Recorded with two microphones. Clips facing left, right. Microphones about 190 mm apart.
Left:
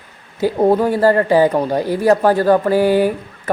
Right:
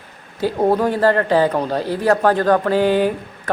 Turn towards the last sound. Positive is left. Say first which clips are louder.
# left 2 dB
turn(degrees=10)  # may be behind; listen again after turning